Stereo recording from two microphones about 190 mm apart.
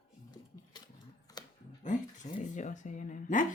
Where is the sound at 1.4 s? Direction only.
20° left (ahead or behind).